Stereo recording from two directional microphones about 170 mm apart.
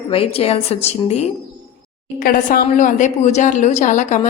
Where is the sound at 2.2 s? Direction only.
60° left (ahead or behind).